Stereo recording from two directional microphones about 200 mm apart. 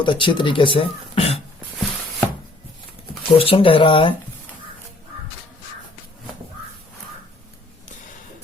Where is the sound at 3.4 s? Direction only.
25° left (ahead or behind).